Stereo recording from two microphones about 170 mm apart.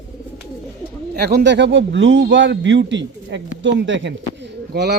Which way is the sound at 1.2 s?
70° right (ahead or behind).